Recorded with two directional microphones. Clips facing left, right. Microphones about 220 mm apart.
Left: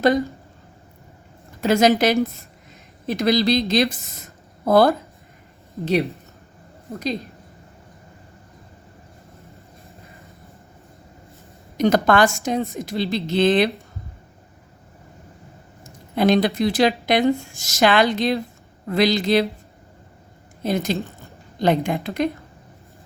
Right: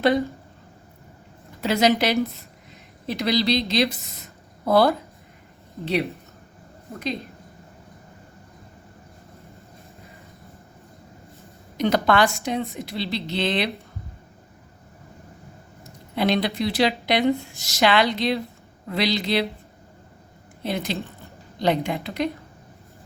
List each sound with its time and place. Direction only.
1.6 s a woman's voice: 50° left (ahead or behind)
5.9 s speech: centre (ahead or behind)
11.8 s a woman's voice: 45° left (ahead or behind)
16.1 s a woman's voice: 45° left (ahead or behind)
20.6 s a woman's voice: 45° left (ahead or behind)